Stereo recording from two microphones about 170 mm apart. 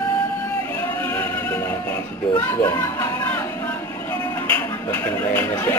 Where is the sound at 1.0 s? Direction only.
10° left (ahead or behind).